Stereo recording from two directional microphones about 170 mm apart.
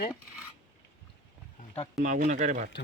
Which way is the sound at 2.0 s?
45° right (ahead or behind).